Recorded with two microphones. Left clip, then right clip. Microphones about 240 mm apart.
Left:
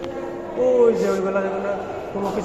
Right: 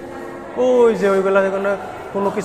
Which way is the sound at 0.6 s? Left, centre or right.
Right.